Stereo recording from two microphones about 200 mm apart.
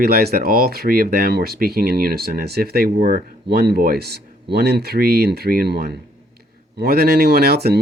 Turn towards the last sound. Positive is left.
turn(degrees=-50)  # may be behind; listen again after turning